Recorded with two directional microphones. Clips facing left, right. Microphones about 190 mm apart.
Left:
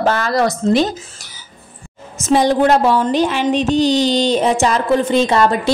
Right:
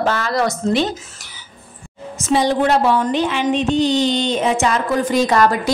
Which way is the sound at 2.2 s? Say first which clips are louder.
Left 3 dB; 45° left (ahead or behind).